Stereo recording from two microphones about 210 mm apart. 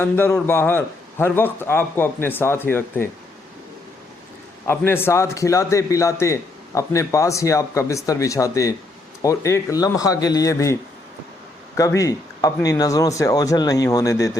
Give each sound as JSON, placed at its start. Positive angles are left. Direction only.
{"t": 0.0, "sound": "a man's voice", "side_deg": 10}
{"t": 4.6, "sound": "a man's voice", "side_deg": 10}
{"t": 11.8, "sound": "a man's voice", "side_deg": 15}